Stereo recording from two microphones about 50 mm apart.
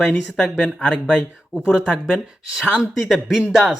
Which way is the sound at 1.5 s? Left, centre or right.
Centre.